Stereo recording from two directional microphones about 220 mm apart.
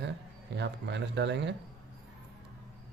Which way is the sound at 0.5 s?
50° right (ahead or behind).